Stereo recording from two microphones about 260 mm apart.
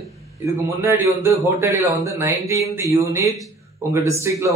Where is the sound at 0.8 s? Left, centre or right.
Centre.